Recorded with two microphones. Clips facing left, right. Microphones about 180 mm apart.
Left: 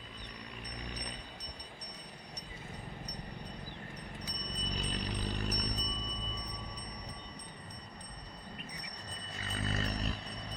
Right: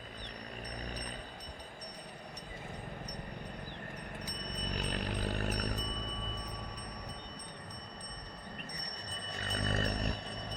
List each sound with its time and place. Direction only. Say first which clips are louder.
4.4 s music: right 1 dB; 50° right (ahead or behind)
9.5 s music: right 2 dB; 55° right (ahead or behind)